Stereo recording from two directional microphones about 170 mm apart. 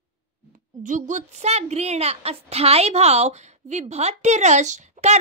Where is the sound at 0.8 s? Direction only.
50° right (ahead or behind).